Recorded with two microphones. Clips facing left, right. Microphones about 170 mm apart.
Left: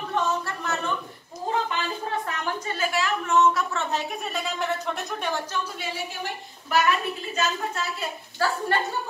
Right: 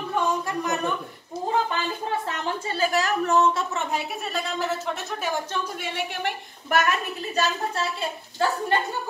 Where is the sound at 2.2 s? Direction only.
30° right (ahead or behind).